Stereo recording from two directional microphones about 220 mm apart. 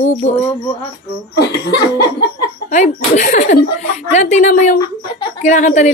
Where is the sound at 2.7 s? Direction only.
35° left (ahead or behind).